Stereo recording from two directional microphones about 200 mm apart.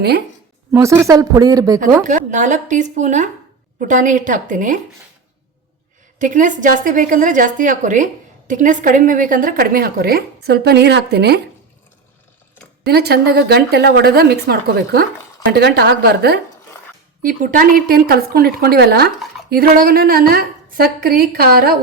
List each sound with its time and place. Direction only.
0.7 s speech: 15° right (ahead or behind)
2.0 s a woman's voice: 40° right (ahead or behind)
6.1 s a woman's voice: 40° right (ahead or behind); by 11.3 s 55° right (ahead or behind)
12.8 s a woman's voice: 55° right (ahead or behind)